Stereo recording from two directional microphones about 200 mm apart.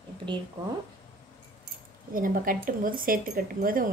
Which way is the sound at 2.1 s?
45° right (ahead or behind).